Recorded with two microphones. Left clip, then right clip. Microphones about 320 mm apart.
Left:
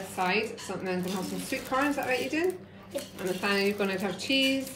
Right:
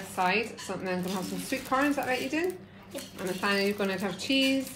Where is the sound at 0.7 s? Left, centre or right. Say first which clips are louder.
Even; centre.